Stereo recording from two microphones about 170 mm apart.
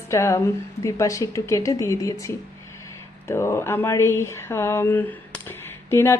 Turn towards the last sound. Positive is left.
turn(degrees=15)  # may be behind; listen again after turning